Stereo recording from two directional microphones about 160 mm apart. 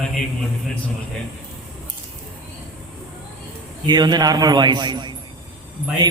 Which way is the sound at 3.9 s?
25° right (ahead or behind).